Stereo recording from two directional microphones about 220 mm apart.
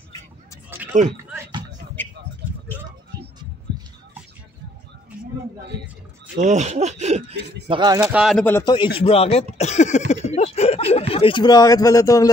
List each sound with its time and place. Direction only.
2.0 s a sound: 10° left (ahead or behind)
6.3 s speech: 30° right (ahead or behind)
8.0 s speech: 5° right (ahead or behind)
8.5 s a man's voice: 10° left (ahead or behind)
8.9 s speech: 25° left (ahead or behind)